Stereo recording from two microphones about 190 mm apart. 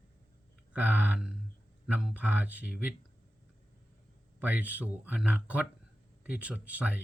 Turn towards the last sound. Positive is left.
turn(degrees=-5)  # may be behind; listen again after turning